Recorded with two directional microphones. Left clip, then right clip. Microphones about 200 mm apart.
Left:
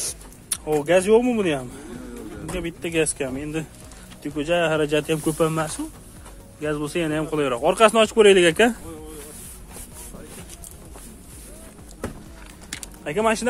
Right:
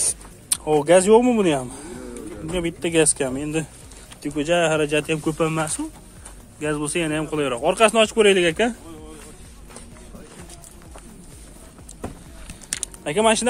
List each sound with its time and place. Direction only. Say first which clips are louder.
0.0 s speech: right 4 dB; 20° right (ahead or behind)
4.2 s speech: right 2 dB; 15° right (ahead or behind)
4.8 s speech: even; centre (ahead or behind)
12.6 s a sound: right 5 dB; 35° right (ahead or behind)
13.0 s speech: right 3 dB; 25° right (ahead or behind)